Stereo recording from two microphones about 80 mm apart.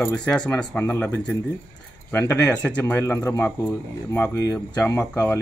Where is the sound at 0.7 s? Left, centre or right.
Left.